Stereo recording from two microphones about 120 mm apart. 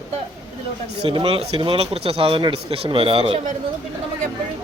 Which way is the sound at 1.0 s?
45° right (ahead or behind).